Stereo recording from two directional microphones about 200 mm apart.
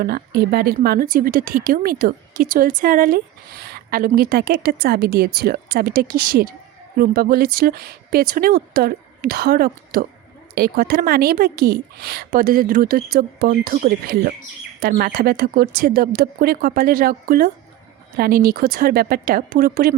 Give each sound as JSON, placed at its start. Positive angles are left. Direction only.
{"t": 0.0, "sound": "a woman's voice", "side_deg": -50}